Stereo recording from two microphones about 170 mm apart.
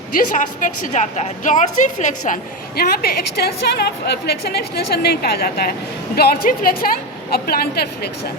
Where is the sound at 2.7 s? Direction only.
65° left (ahead or behind).